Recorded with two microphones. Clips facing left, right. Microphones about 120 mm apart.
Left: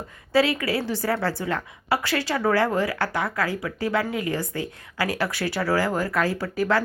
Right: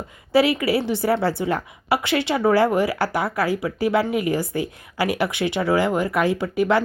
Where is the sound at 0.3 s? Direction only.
25° right (ahead or behind).